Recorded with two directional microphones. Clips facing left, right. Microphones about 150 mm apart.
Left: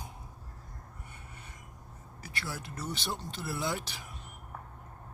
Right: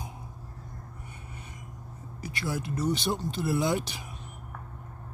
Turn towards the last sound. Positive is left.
turn(degrees=-15)  # may be behind; listen again after turning